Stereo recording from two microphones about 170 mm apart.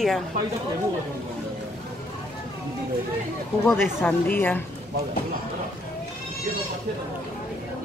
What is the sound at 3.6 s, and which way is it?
Speech, 5° left (ahead or behind).